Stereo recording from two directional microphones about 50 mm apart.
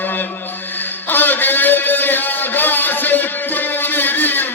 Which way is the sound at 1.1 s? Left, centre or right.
Left.